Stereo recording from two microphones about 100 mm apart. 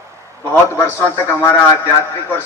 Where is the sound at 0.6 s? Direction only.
25° left (ahead or behind).